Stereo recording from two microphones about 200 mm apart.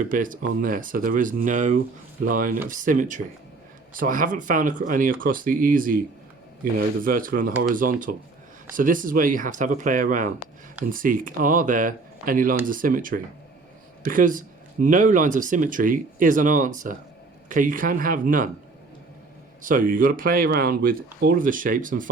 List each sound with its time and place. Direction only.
0.0 s speech: 40° right (ahead or behind)
19.6 s speech: 45° right (ahead or behind)